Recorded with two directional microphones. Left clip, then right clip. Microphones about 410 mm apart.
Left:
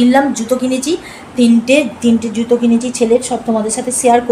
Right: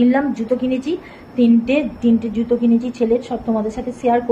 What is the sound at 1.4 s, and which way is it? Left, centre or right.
Speech, right.